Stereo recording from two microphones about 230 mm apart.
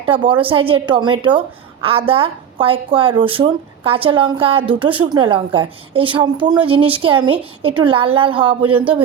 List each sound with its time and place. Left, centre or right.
0.0 s a woman's voice: right